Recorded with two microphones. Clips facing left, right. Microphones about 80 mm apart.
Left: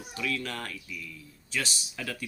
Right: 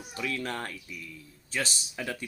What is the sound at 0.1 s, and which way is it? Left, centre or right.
Speech, right.